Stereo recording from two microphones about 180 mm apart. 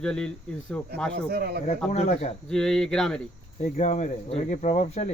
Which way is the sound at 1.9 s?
35° left (ahead or behind).